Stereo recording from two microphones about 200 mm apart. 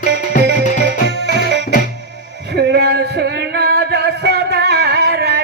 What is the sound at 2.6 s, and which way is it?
Music, 55° right (ahead or behind).